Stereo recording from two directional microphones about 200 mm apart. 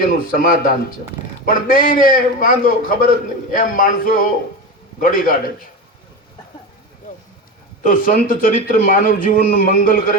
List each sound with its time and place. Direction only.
0.0 s a man's voice: 45° left (ahead or behind)
7.9 s a man's voice: 45° left (ahead or behind)